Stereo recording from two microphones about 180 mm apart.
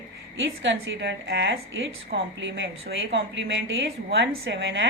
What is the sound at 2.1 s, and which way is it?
Speech, 85° right.